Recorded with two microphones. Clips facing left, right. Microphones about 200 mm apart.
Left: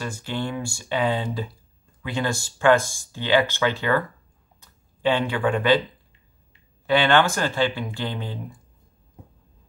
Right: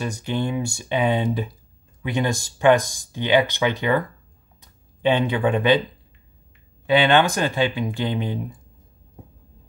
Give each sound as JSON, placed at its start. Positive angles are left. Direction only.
{"t": 0.0, "sound": "speech", "side_deg": -20}
{"t": 5.0, "sound": "speech", "side_deg": -20}
{"t": 6.9, "sound": "speech", "side_deg": -20}